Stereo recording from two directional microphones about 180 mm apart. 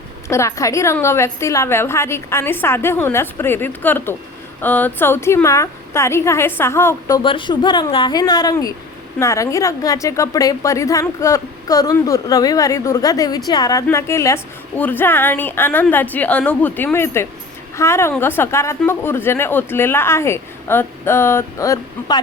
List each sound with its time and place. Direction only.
0.3 s a woman's voice: 15° left (ahead or behind)
7.2 s a woman's voice: 30° left (ahead or behind)